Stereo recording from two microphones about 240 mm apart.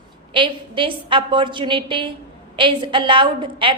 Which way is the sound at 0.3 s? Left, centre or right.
Right.